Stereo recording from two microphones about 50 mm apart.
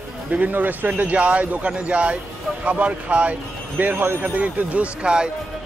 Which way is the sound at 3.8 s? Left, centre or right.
Right.